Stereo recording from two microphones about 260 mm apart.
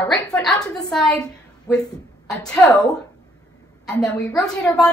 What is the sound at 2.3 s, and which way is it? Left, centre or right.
Speech, centre.